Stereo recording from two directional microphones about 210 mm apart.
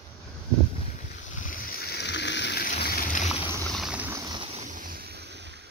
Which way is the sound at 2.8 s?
45° left (ahead or behind).